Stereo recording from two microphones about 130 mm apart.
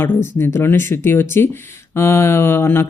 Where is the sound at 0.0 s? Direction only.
20° left (ahead or behind).